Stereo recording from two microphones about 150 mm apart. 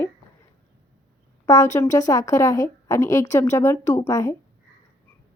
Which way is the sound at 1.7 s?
20° left (ahead or behind).